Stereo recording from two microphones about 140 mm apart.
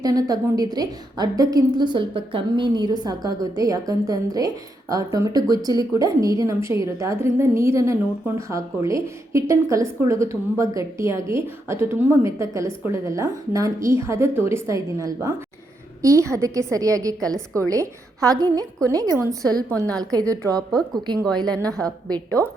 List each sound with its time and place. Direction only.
0.0 s a woman's voice: 25° right (ahead or behind)
21.6 s a woman's voice: 5° left (ahead or behind)